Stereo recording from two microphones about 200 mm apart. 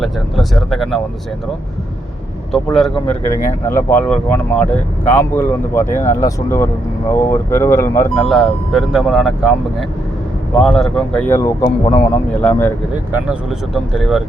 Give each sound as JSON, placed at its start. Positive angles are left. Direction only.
{"t": 0.0, "sound": "speech", "side_deg": 0}
{"t": 2.7, "sound": "speech", "side_deg": 0}
{"t": 3.7, "sound": "speech", "side_deg": 10}
{"t": 10.5, "sound": "speech", "side_deg": 5}
{"t": 11.6, "sound": "speech", "side_deg": 25}
{"t": 12.3, "sound": "speech", "side_deg": 5}
{"t": 13.7, "sound": "speech", "side_deg": 0}